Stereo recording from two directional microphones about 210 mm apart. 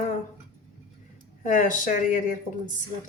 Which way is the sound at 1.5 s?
40° left (ahead or behind).